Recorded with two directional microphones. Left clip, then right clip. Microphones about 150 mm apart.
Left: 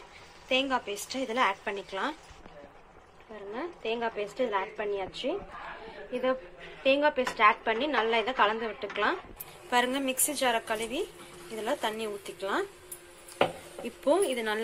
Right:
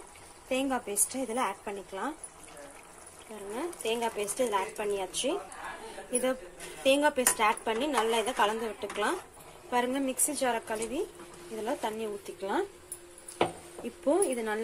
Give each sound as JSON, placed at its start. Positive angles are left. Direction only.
{"t": 0.5, "sound": "speech", "side_deg": -20}
{"t": 1.1, "sound": "a woman's voice", "side_deg": -10}
{"t": 3.5, "sound": "speech", "side_deg": -15}
{"t": 6.8, "sound": "a woman's voice", "side_deg": -15}
{"t": 14.0, "sound": "speech", "side_deg": -10}